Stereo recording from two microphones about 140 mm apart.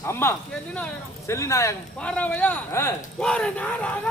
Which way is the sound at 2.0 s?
10° left (ahead or behind).